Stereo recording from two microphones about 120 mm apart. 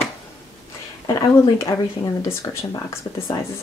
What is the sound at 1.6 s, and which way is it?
Speech, 25° left (ahead or behind).